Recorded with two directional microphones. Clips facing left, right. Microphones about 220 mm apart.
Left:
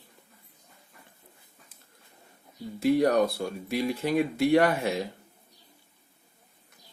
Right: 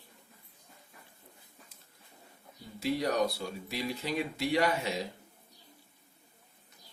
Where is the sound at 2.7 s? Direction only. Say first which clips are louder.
Left 8 dB; 50° left (ahead or behind).